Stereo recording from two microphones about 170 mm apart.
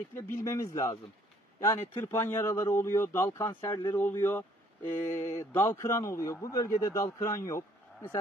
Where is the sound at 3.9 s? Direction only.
10° left (ahead or behind).